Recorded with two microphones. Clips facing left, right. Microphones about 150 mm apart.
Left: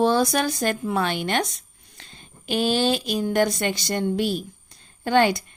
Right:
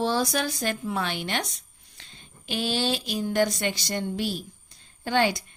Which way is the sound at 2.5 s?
50° left (ahead or behind).